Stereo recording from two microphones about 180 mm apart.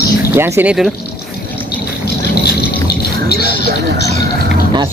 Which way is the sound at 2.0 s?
60° left (ahead or behind).